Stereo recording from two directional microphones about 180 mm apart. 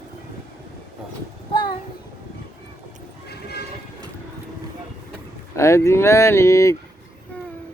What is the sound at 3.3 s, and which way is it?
Train, 65° left (ahead or behind).